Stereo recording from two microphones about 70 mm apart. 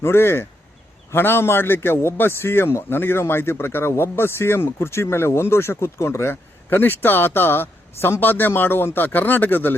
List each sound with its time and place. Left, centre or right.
0.0 s a man's voice: left